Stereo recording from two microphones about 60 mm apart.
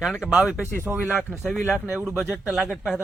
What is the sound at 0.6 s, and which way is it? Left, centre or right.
Speech, right.